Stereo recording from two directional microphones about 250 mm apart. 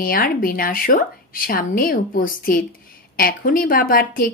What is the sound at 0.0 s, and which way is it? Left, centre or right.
A woman's voice, left.